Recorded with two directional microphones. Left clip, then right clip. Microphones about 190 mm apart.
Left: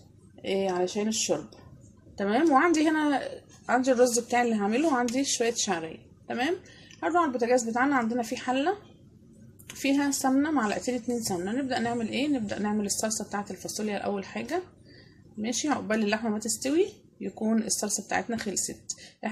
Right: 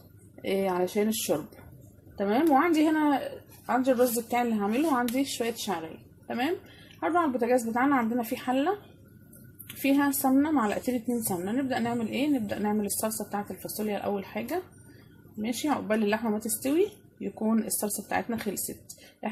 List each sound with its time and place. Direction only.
0.4 s speech: 10° right (ahead or behind)
2.1 s a woman's voice: 5° left (ahead or behind)
7.0 s speech: 5° right (ahead or behind)
9.8 s speech: centre (ahead or behind)